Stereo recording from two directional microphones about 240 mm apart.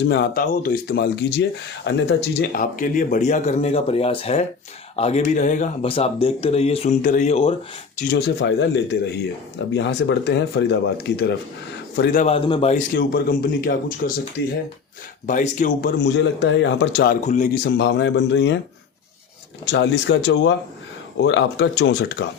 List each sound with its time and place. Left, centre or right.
0.1 s speech: left
8.1 s speech: left
12.2 s speech: left
15.3 s speech: left
17.2 s speech: left
19.6 s speech: left